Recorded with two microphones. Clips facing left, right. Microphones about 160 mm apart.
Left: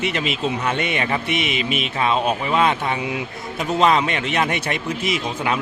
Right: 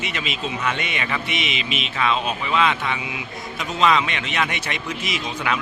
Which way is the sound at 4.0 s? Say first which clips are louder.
Left 3 dB; 45° left (ahead or behind).